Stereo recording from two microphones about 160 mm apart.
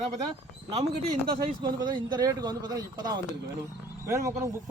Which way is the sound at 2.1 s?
25° right (ahead or behind).